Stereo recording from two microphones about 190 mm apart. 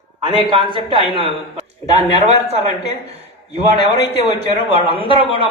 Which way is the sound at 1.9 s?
35° right (ahead or behind).